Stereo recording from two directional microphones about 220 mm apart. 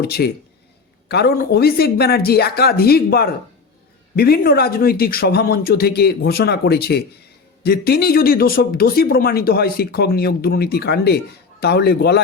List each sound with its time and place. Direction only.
0.0 s speech: 45° left (ahead or behind)